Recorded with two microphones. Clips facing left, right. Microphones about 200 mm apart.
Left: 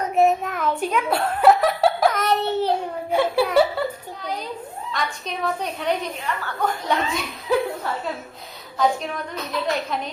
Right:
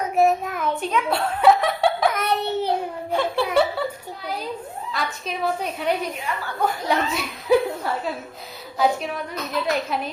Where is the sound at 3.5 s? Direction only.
5° right (ahead or behind).